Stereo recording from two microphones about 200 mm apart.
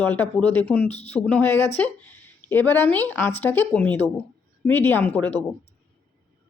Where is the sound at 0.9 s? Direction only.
30° left (ahead or behind).